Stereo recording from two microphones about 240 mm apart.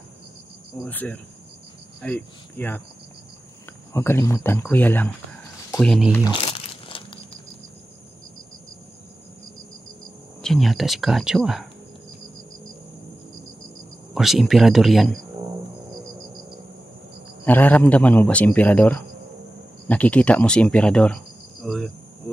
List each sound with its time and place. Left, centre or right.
0.8 s a man's voice: centre
3.9 s a man's voice: centre
6.1 s crumpling: centre
10.4 s speech: centre
14.1 s speech: centre
17.5 s a man's voice: centre